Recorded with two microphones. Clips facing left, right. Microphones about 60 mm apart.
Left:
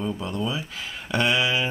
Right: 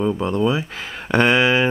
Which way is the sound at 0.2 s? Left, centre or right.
Right.